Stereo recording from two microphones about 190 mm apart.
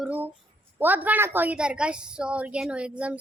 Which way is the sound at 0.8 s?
10° right (ahead or behind).